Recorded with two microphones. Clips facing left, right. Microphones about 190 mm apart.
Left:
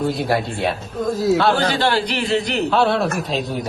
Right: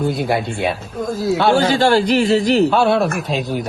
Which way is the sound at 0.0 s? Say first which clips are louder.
Right 1 dB; centre (ahead or behind).